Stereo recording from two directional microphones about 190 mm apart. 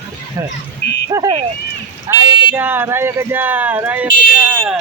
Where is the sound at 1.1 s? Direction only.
20° right (ahead or behind).